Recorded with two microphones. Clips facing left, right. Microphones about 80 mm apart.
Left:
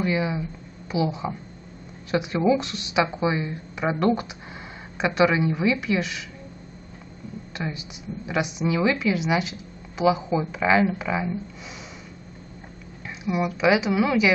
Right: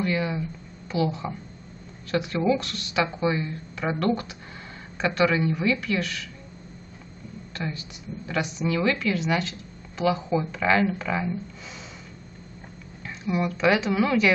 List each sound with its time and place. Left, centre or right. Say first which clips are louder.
0.0 s a woman's voice: left 2 dB; centre
7.5 s a woman's voice: left 1 dB; centre
13.0 s a woman's voice: left 1 dB; centre